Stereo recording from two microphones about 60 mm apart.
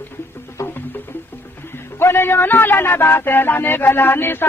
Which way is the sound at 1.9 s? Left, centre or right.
Left.